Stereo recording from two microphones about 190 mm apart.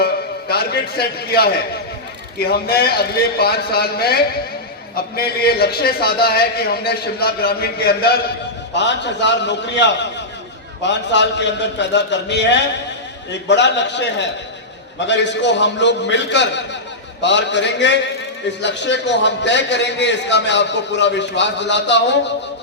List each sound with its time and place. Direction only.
0.0 s a man's voice: 55° left (ahead or behind)
8.7 s a man's voice: 65° left (ahead or behind)